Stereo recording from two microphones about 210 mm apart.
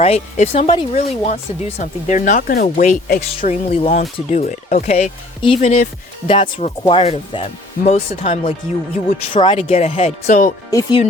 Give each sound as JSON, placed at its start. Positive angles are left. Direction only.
{"t": 0.0, "sound": "speech", "side_deg": 30}
{"t": 0.9, "sound": "speech", "side_deg": 35}
{"t": 10.7, "sound": "speech", "side_deg": 15}